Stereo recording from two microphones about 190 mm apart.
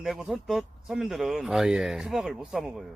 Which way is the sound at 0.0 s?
Centre (ahead or behind).